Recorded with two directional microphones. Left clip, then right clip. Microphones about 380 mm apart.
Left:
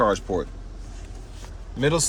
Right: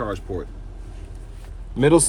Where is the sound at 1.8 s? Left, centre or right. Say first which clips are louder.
Right 6 dB; centre.